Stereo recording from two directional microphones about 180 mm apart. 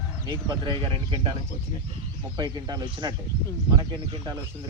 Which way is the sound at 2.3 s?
25° right (ahead or behind).